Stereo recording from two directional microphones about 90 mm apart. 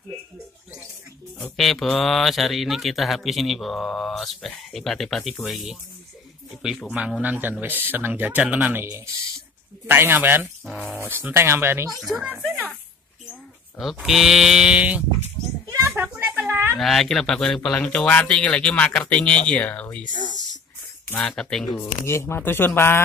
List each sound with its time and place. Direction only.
1.4 s speech: centre (ahead or behind)
6.9 s livestock: 10° right (ahead or behind)
7.6 s speech: 20° right (ahead or behind)
12.4 s a sound: centre (ahead or behind)
14.0 s livestock: 5° right (ahead or behind)
15.7 s a sound: 30° right (ahead or behind)
16.7 s speech: centre (ahead or behind)
21.2 s speech: 5° left (ahead or behind)
21.7 s speech: 30° left (ahead or behind)